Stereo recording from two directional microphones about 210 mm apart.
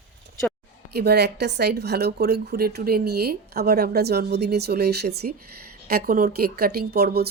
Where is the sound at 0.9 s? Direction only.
50° right (ahead or behind).